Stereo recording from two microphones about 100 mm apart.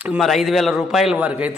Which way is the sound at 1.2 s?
15° right (ahead or behind).